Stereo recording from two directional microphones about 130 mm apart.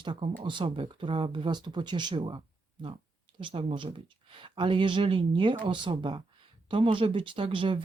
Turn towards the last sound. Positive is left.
turn(degrees=-40)  # may be behind; listen again after turning